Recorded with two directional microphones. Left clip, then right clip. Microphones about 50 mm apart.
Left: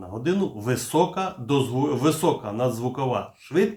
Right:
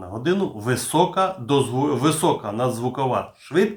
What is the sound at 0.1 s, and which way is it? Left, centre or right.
Speech, right.